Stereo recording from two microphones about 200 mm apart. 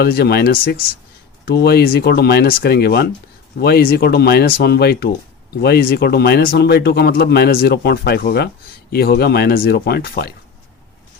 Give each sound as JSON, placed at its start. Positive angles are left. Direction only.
{"t": 0.0, "sound": "speech", "side_deg": 50}